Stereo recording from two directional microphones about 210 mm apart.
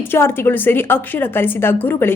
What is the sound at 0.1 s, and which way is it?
A woman's voice, 10° left (ahead or behind).